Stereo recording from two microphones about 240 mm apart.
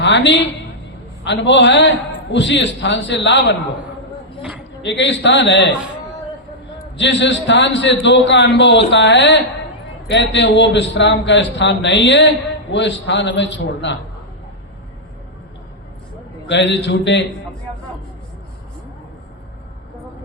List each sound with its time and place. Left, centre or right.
0.0 s a woman's voice: left
4.8 s a man's voice: left
6.9 s a man's voice: left
16.5 s a man's voice: left